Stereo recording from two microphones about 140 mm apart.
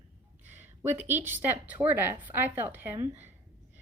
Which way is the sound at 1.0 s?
15° right (ahead or behind).